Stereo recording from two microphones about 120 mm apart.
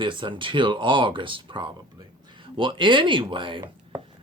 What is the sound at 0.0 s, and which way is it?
Speech, 40° right (ahead or behind).